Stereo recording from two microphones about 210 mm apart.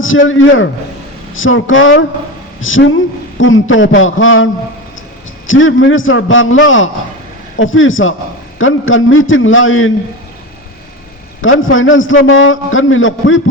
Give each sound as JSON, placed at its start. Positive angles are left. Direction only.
{"t": 0.0, "sound": "a man's voice", "side_deg": 70}
{"t": 5.5, "sound": "a man's voice", "side_deg": 70}
{"t": 11.4, "sound": "a man's voice", "side_deg": 70}